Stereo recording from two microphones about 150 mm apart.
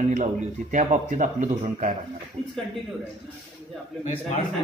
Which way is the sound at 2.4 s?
40° right (ahead or behind).